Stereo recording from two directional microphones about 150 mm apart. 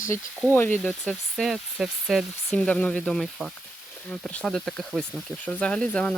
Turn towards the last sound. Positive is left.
turn(degrees=5)  # may be behind; listen again after turning